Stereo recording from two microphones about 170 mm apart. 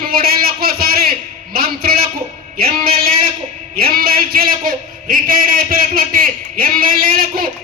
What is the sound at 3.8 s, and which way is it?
A man's voice, 60° right (ahead or behind).